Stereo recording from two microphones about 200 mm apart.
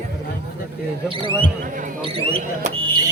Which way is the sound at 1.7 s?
40° right (ahead or behind).